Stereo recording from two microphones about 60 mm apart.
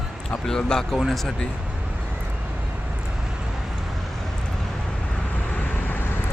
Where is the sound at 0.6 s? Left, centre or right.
Centre.